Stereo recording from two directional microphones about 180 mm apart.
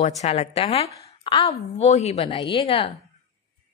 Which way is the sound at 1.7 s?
35° left (ahead or behind).